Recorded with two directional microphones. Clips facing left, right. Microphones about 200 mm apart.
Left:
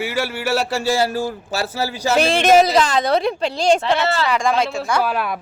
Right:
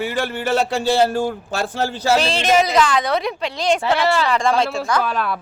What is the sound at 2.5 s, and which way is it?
A woman's voice, 35° left (ahead or behind).